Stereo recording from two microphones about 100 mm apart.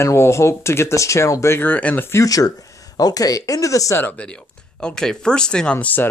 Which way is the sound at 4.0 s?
15° left (ahead or behind).